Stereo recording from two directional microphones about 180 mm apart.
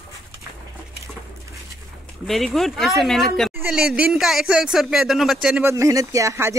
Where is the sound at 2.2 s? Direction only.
Centre (ahead or behind).